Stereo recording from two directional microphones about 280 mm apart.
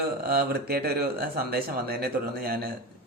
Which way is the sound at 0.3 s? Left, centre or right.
Right.